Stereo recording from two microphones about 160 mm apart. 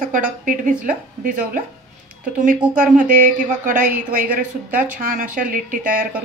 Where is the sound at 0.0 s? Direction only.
55° right (ahead or behind).